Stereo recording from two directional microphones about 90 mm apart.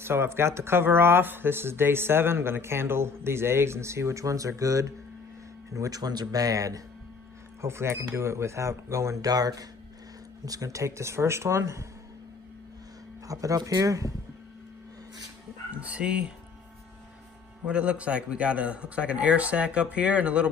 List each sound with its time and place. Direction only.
0.0 s speech: 25° right (ahead or behind)
13.3 s speech: 40° right (ahead or behind)
15.7 s a man's voice: 15° right (ahead or behind)
17.6 s a man's voice: 15° right (ahead or behind)